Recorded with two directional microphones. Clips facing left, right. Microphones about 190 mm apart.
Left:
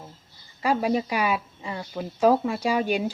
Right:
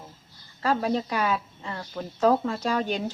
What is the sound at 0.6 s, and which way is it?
A woman's voice, 10° left (ahead or behind).